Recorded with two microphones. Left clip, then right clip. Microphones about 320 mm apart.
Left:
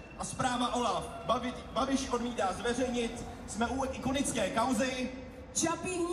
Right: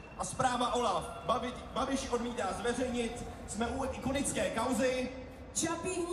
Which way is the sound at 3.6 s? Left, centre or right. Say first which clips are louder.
Left 3 dB; centre.